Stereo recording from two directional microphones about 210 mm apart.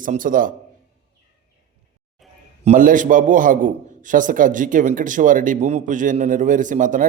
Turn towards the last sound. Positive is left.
turn(degrees=-40)  # may be behind; listen again after turning